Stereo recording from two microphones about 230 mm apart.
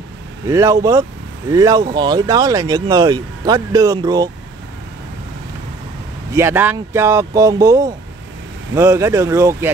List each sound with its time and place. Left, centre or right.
0.5 s speech: centre
6.3 s speech: centre